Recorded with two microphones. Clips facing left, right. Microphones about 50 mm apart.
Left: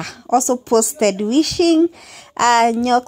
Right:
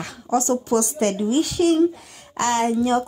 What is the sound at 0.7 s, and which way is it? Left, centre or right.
A woman's voice, left.